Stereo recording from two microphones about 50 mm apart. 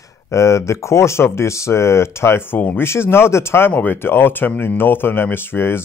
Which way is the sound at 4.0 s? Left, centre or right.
Left.